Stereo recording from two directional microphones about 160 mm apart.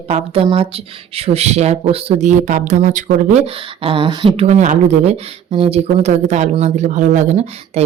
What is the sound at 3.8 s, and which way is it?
Speech, 35° right (ahead or behind).